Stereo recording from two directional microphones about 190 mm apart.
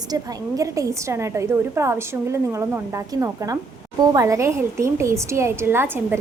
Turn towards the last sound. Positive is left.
turn(degrees=-10)  # may be behind; listen again after turning